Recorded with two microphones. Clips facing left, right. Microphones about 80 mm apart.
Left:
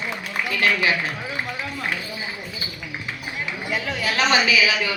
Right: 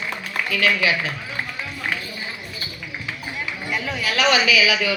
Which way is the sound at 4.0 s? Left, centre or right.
Left.